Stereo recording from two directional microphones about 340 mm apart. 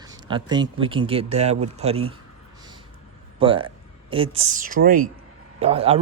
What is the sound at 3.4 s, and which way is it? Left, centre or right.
A woman's voice, centre.